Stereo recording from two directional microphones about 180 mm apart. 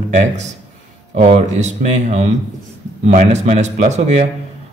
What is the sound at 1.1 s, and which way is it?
Speech, 40° right (ahead or behind).